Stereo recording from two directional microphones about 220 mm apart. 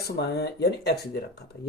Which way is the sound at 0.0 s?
50° left (ahead or behind).